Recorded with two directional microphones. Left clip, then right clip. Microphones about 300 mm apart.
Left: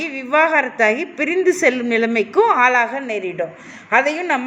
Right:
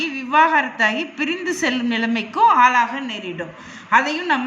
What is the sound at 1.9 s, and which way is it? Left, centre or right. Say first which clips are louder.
Speech: left 5 dB; right.